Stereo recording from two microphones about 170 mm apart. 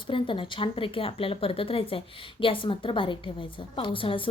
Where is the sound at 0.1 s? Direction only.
30° left (ahead or behind).